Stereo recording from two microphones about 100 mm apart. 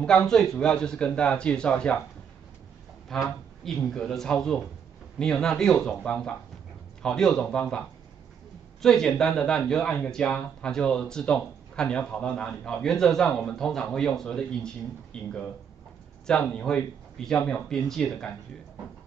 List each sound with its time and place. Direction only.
0.0 s speech: 5° left (ahead or behind)
3.1 s speech: 5° left (ahead or behind)
8.8 s speech: 5° left (ahead or behind)